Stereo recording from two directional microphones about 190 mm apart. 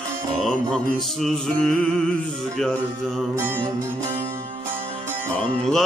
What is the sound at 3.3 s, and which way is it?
Music, 10° right (ahead or behind).